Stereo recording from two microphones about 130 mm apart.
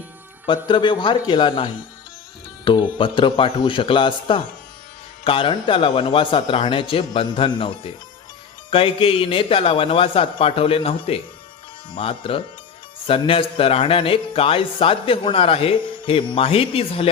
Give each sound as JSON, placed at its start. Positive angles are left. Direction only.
{"t": 0.4, "sound": "a man's voice", "side_deg": 35}